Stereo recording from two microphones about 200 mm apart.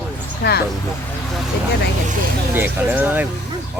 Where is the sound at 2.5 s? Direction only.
10° right (ahead or behind).